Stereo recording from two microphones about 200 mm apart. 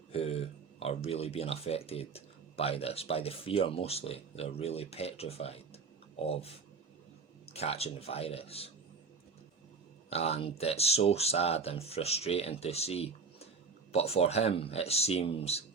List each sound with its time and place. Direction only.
0.1 s speech: 30° left (ahead or behind)
7.5 s speech: 30° left (ahead or behind)
10.1 s speech: 30° left (ahead or behind)